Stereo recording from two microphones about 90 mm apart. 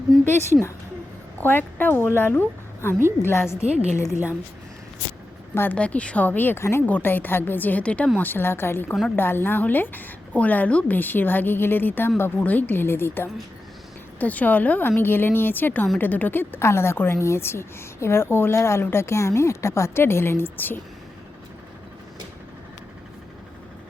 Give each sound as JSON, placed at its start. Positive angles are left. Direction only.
{"t": 1.4, "sound": "a woman's voice", "side_deg": 20}
{"t": 5.7, "sound": "a woman's voice", "side_deg": 15}
{"t": 8.2, "sound": "a woman's voice", "side_deg": 25}